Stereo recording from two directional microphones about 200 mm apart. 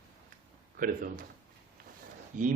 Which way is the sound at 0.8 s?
45° right (ahead or behind).